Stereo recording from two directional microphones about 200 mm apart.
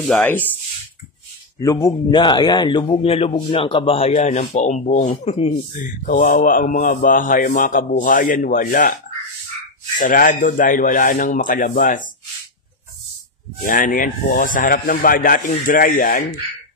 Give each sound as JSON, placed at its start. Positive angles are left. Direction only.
{"t": 0.1, "sound": "speech", "side_deg": 10}
{"t": 1.6, "sound": "a man's voice", "side_deg": 15}
{"t": 6.0, "sound": "speech", "side_deg": 45}
{"t": 9.9, "sound": "speech", "side_deg": 40}
{"t": 13.7, "sound": "speech", "side_deg": 45}